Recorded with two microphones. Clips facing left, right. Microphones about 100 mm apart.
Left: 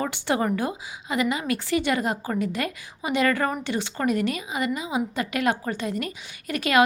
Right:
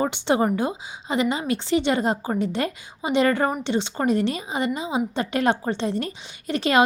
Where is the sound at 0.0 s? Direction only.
20° right (ahead or behind).